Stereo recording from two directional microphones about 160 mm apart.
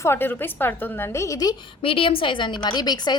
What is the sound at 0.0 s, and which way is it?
A woman's voice, 15° left (ahead or behind).